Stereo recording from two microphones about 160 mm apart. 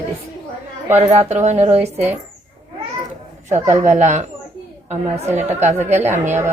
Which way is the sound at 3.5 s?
15° right (ahead or behind).